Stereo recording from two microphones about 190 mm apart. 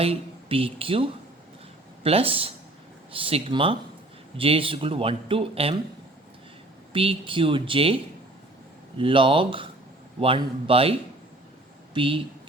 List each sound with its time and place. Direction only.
0.0 s speech: 30° right (ahead or behind)
2.0 s speech: 30° right (ahead or behind)
6.9 s speech: 30° right (ahead or behind)
9.0 s speech: 25° right (ahead or behind)